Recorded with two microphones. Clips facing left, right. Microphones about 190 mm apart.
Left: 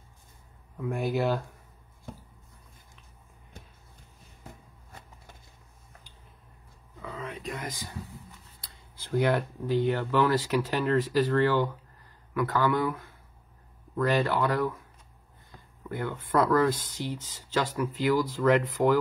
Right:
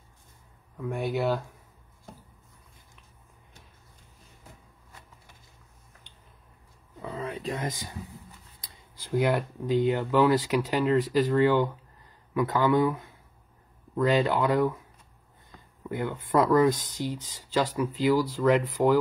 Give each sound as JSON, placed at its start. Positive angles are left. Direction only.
{"t": 0.7, "sound": "speech", "side_deg": 0}
{"t": 7.0, "sound": "a sound", "side_deg": -30}
{"t": 8.6, "sound": "speech", "side_deg": -15}
{"t": 15.9, "sound": "speech", "side_deg": -15}